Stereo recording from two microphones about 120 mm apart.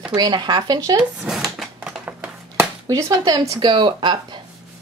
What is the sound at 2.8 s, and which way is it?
Speech, 30° right (ahead or behind).